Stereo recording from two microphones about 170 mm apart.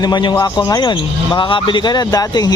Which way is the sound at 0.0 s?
25° left (ahead or behind).